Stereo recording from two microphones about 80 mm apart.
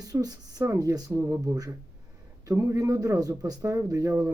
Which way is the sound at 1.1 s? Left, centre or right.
Right.